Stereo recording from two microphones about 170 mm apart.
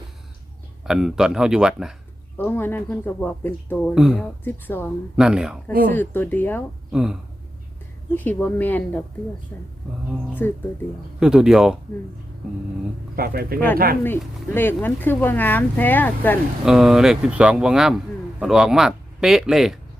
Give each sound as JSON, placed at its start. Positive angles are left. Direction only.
{"t": 0.9, "sound": "a man's voice", "side_deg": 0}
{"t": 2.4, "sound": "speech", "side_deg": 10}
{"t": 3.9, "sound": "a man's voice", "side_deg": -5}
{"t": 4.2, "sound": "speech", "side_deg": 10}
{"t": 5.1, "sound": "a man's voice", "side_deg": -5}
{"t": 5.9, "sound": "speech", "side_deg": 10}
{"t": 6.9, "sound": "a man's voice", "side_deg": -5}
{"t": 8.1, "sound": "speech", "side_deg": 10}
{"t": 10.4, "sound": "speech", "side_deg": 15}
{"t": 11.2, "sound": "a man's voice", "side_deg": -5}
{"t": 13.1, "sound": "speech", "side_deg": -65}
{"t": 14.5, "sound": "speech", "side_deg": 10}
{"t": 16.6, "sound": "a man's voice", "side_deg": 0}